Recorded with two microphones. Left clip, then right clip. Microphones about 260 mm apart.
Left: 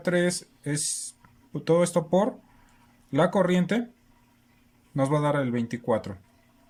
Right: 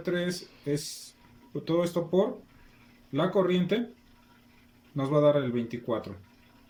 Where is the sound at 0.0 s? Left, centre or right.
Left.